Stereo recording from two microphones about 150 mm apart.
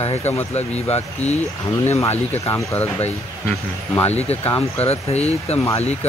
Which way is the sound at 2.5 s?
20° left (ahead or behind).